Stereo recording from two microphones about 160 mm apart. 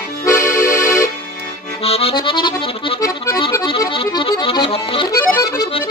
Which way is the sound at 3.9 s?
30° left (ahead or behind).